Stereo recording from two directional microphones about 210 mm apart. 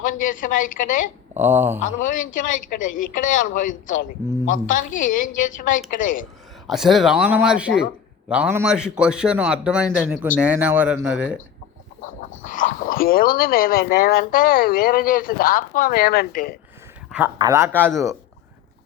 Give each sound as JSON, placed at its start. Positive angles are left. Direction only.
{"t": 0.0, "sound": "speech", "side_deg": 40}
{"t": 1.4, "sound": "speech", "side_deg": -10}
{"t": 2.0, "sound": "speech", "side_deg": 40}
{"t": 6.7, "sound": "a man's voice", "side_deg": 0}
{"t": 12.5, "sound": "speech", "side_deg": 40}
{"t": 17.1, "sound": "a man's voice", "side_deg": -10}